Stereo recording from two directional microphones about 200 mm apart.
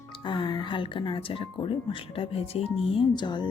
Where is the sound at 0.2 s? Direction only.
25° left (ahead or behind).